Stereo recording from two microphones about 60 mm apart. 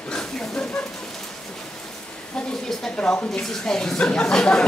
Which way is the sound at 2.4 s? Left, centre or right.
Centre.